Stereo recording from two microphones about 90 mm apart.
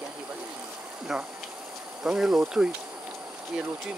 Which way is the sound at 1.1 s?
5° right (ahead or behind).